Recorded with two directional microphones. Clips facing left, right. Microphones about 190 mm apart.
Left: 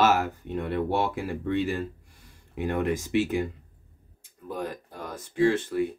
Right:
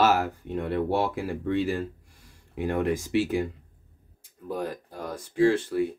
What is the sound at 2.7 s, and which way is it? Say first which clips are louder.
Speech: right 1 dB; 35° right (ahead or behind).